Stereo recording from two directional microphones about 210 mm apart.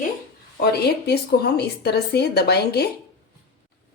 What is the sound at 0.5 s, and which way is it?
A woman's voice, 50° left (ahead or behind).